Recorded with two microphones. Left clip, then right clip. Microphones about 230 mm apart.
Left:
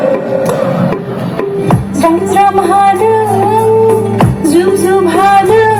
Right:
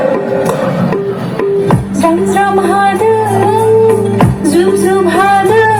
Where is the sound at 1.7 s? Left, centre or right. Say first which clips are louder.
Left 1 dB; left.